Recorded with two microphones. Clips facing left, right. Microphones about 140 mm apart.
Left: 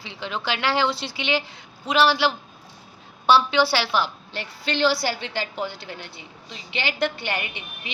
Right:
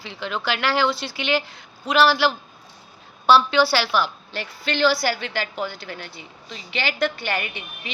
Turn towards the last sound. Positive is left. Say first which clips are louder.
# right 2 dB
turn(degrees=20)  # may be behind; listen again after turning